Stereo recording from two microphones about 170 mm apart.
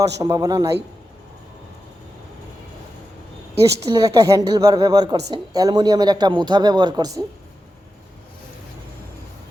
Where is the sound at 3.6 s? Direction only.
20° right (ahead or behind).